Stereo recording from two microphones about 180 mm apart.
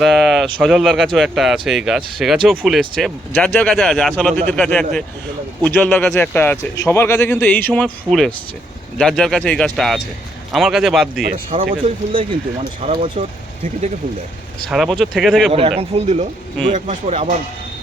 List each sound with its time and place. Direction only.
0.0 s speech: centre (ahead or behind)
11.8 s speech: 30° right (ahead or behind)
14.7 s speech: centre (ahead or behind)
15.8 s speech: 35° right (ahead or behind)